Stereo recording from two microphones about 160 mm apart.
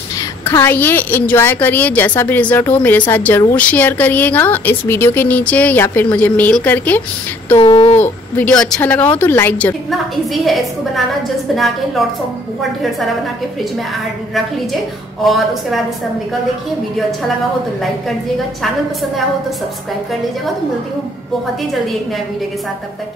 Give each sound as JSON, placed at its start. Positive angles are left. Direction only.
{"t": 0.5, "sound": "a woman's voice", "side_deg": 15}
{"t": 7.5, "sound": "a sound", "side_deg": 35}
{"t": 8.0, "sound": "a woman's voice", "side_deg": 10}
{"t": 9.8, "sound": "a woman's voice", "side_deg": 0}
{"t": 15.2, "sound": "a woman's voice", "side_deg": 0}